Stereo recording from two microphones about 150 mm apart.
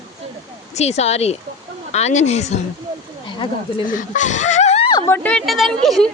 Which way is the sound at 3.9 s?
55° left (ahead or behind).